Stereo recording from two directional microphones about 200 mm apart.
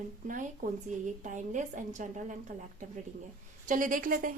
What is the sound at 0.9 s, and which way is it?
A woman's voice, 40° right (ahead or behind).